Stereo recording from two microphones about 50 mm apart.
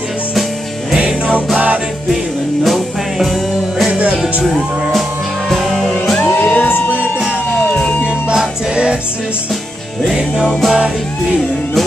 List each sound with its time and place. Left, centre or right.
0.9 s music: right
2.6 s music: centre
4.2 s speech: centre
5.5 s music: centre
6.2 s music: left
7.6 s music: left
8.3 s music: centre
10.0 s music: centre